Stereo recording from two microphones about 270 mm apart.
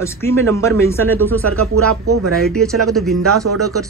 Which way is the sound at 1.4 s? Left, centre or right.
Right.